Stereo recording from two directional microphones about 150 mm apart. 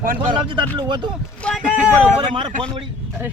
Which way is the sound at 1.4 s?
Centre (ahead or behind).